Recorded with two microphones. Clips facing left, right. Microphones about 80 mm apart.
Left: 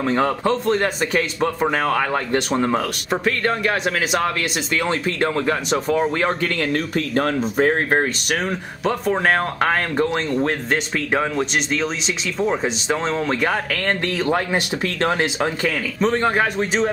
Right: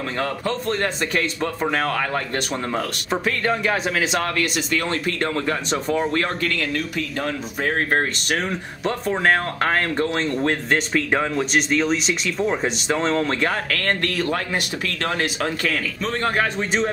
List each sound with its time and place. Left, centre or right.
0.1 s speech: left
3.1 s speech: centre
4.1 s speech: centre
5.9 s speech: centre
6.4 s speech: left
7.0 s speech: left
7.9 s speech: centre